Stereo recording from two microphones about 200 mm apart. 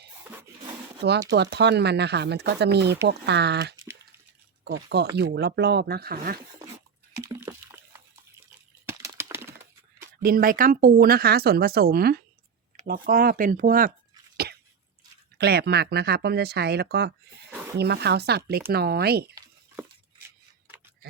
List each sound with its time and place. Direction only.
1.3 s speech: 55° right (ahead or behind)
7.2 s a sound: 15° right (ahead or behind)
8.9 s typing: 15° right (ahead or behind)
10.2 s speech: 45° right (ahead or behind)
15.4 s speech: 50° right (ahead or behind)